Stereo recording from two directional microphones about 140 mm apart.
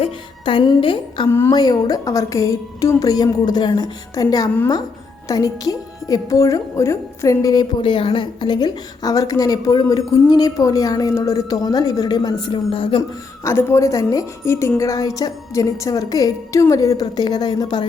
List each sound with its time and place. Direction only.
0.0 s a woman's voice: 40° left (ahead or behind)
1.3 s a woman's voice: 20° left (ahead or behind)
1.5 s a woman's voice: 30° left (ahead or behind)
13.0 s a woman's voice: 20° left (ahead or behind)